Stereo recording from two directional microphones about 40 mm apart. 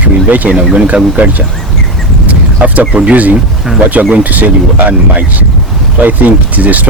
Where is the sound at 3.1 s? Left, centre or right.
Right.